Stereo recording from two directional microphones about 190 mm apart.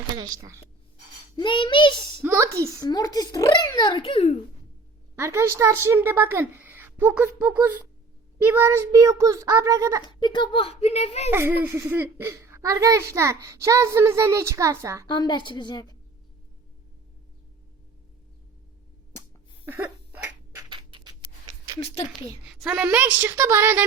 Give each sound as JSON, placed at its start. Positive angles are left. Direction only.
{"t": 0.2, "sound": "a woman's voice", "side_deg": -15}
{"t": 1.4, "sound": "a child's voice", "side_deg": 25}
{"t": 2.2, "sound": "speech", "side_deg": -15}
{"t": 2.8, "sound": "a child's voice", "side_deg": 20}
{"t": 5.1, "sound": "speech", "side_deg": -15}
{"t": 10.0, "sound": "speech", "side_deg": 25}
{"t": 11.3, "sound": "speech", "side_deg": -10}
{"t": 15.0, "sound": "a child's voice", "side_deg": 20}
{"t": 20.6, "sound": "a sound", "side_deg": -25}
{"t": 22.6, "sound": "speech", "side_deg": -5}